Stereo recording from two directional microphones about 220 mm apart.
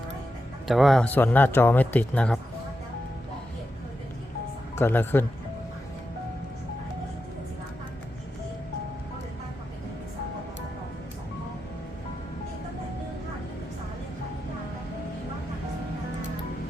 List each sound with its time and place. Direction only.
0.7 s speech: centre (ahead or behind)
4.7 s speech: 10° left (ahead or behind)